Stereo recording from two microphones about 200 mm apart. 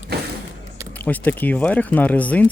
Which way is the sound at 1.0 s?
10° left (ahead or behind).